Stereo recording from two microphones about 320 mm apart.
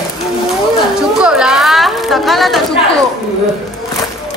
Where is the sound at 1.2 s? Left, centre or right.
Centre.